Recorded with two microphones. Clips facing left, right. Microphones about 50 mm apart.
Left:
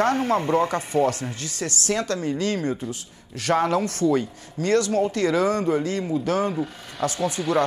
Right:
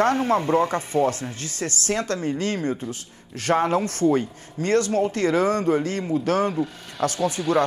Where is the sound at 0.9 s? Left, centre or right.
Right.